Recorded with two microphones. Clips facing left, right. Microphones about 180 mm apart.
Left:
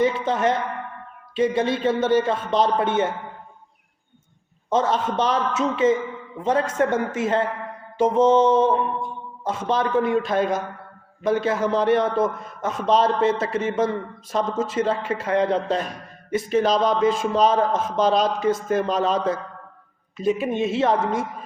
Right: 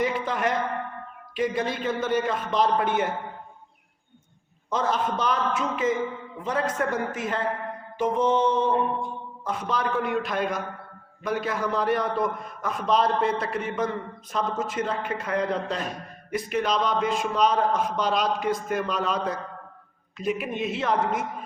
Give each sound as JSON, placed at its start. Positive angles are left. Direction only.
{"t": 0.0, "sound": "a man's voice", "side_deg": 25}
{"t": 4.7, "sound": "a man's voice", "side_deg": 25}
{"t": 8.0, "sound": "mantra", "side_deg": 90}
{"t": 9.4, "sound": "a man's voice", "side_deg": 25}